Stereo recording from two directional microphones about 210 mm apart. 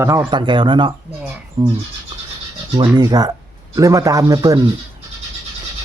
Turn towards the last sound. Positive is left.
turn(degrees=-15)  # may be behind; listen again after turning